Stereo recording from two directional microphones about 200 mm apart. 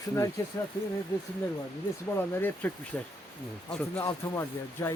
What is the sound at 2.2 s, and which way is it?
A man's voice, 10° left (ahead or behind).